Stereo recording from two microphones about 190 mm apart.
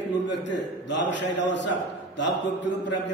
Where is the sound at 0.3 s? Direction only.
70° left (ahead or behind).